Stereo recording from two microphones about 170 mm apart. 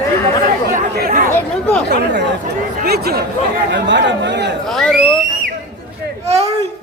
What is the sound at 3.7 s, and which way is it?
Speech, 90° right.